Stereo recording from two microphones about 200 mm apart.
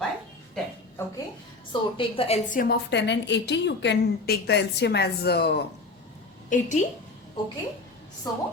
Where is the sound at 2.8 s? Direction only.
60° left (ahead or behind).